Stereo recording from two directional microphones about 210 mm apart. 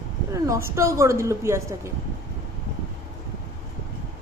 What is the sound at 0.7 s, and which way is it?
A woman's voice, 15° right (ahead or behind).